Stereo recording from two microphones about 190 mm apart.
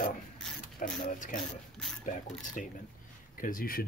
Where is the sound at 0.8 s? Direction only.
45° left (ahead or behind).